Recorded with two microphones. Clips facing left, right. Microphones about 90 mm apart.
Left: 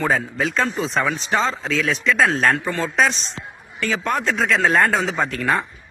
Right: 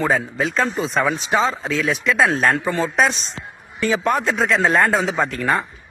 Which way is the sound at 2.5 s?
15° right (ahead or behind).